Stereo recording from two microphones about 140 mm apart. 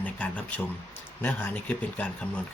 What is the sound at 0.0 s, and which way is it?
Speech, 10° left (ahead or behind).